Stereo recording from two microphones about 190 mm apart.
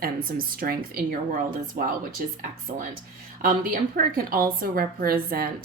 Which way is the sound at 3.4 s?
50° right (ahead or behind).